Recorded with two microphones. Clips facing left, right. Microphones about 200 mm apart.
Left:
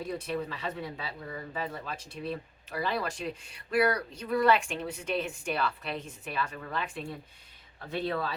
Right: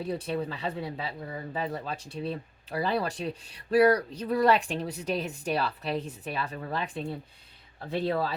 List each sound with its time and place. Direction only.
0.0 s speech: 30° right (ahead or behind)